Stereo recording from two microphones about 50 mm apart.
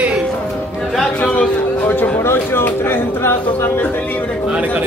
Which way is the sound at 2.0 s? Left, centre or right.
Left.